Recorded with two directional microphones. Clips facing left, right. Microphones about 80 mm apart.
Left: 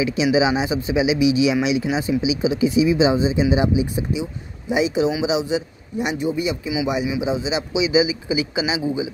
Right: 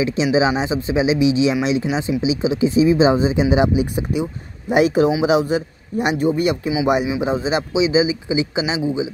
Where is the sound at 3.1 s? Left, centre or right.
Right.